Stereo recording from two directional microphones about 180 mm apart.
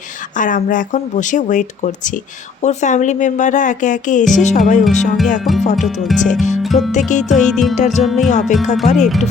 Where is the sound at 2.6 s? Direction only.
40° left (ahead or behind).